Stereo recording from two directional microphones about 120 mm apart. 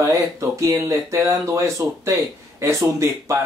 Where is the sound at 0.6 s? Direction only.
25° right (ahead or behind).